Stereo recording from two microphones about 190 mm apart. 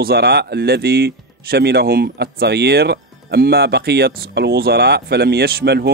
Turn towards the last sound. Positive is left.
turn(degrees=-60)  # may be behind; listen again after turning